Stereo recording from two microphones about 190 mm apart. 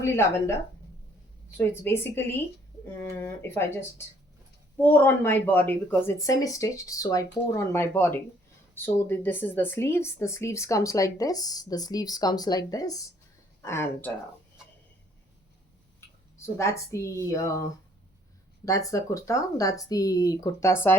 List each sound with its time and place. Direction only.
0.0 s speech: 15° left (ahead or behind)
1.5 s speech: 10° left (ahead or behind)
16.6 s speech: 15° left (ahead or behind)
18.6 s speech: 15° left (ahead or behind)